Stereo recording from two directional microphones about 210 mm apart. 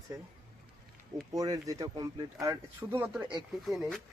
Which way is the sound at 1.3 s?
15° right (ahead or behind).